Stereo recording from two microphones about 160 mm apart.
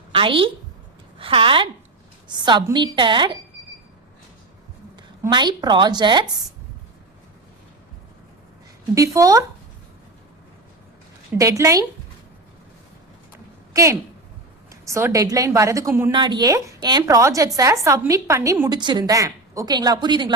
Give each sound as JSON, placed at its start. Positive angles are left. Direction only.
{"t": 0.1, "sound": "a woman's voice", "side_deg": -35}
{"t": 5.3, "sound": "a woman's voice", "side_deg": -25}
{"t": 9.0, "sound": "a woman's voice", "side_deg": -20}
{"t": 11.3, "sound": "a woman's voice", "side_deg": -20}
{"t": 13.7, "sound": "a woman's voice", "side_deg": -20}
{"t": 16.1, "sound": "a woman's voice", "side_deg": -30}